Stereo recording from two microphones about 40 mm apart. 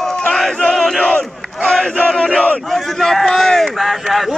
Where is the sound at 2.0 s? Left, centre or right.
Centre.